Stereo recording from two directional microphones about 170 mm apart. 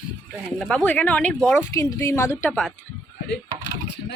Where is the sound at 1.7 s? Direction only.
20° left (ahead or behind).